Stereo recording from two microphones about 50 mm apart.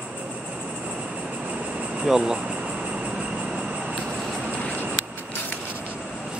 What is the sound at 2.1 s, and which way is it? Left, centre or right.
Speech, centre.